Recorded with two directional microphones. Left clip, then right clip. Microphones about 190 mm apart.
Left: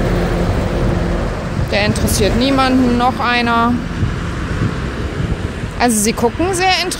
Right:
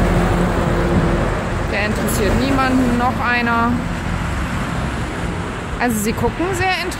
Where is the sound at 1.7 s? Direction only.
35° left (ahead or behind).